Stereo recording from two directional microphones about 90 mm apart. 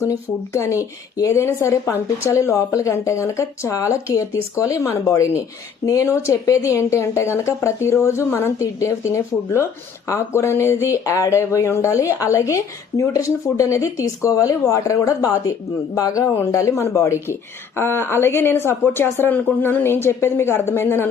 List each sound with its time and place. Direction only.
0.0 s speech: 30° left (ahead or behind)
16.3 s speech: 25° left (ahead or behind)